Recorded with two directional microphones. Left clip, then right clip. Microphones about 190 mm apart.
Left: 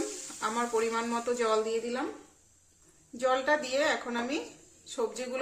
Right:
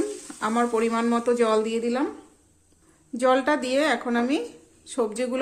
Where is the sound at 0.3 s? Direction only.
40° right (ahead or behind).